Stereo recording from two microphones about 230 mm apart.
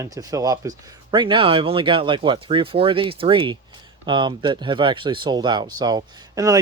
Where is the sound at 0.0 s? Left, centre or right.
Centre.